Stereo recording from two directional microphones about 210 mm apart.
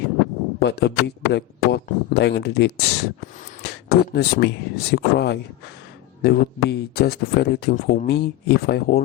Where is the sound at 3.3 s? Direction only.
35° left (ahead or behind).